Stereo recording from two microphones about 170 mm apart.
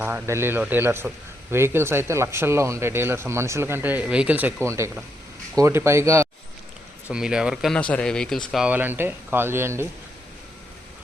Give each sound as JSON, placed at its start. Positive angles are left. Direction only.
{"t": 0.0, "sound": "a man's voice", "side_deg": -15}
{"t": 7.1, "sound": "speech", "side_deg": -5}